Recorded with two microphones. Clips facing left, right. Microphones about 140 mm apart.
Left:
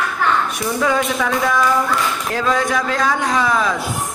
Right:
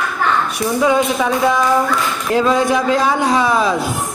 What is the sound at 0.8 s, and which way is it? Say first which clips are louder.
A man's voice: right 4 dB; 20° right (ahead or behind).